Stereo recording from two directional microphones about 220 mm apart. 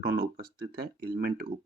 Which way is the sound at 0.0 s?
45° right (ahead or behind).